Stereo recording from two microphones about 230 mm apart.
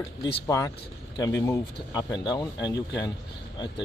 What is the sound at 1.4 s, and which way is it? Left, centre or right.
Speech, centre.